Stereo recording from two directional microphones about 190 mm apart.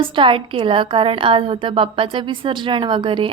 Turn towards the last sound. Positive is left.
turn(degrees=-25)  # may be behind; listen again after turning